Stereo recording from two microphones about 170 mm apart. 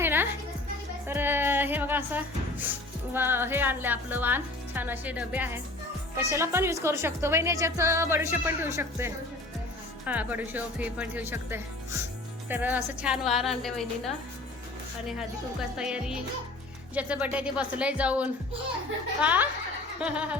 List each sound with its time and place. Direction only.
0.0 s music: 10° right (ahead or behind)
3.1 s a woman's voice: 10° right (ahead or behind)
15.8 s a woman's voice: 5° right (ahead or behind)